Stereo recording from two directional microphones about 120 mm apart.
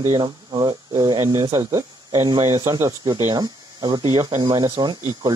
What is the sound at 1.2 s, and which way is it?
Speech, 25° right (ahead or behind).